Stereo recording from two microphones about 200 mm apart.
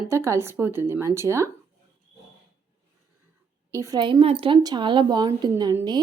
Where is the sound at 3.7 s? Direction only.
15° right (ahead or behind).